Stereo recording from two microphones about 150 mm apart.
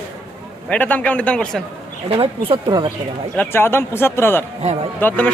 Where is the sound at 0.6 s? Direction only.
10° left (ahead or behind).